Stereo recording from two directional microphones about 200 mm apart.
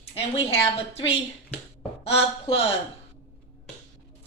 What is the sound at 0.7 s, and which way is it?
A woman's voice, 30° left (ahead or behind).